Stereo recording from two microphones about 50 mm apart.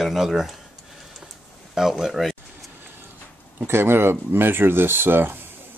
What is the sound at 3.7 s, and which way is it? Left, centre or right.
Speech, right.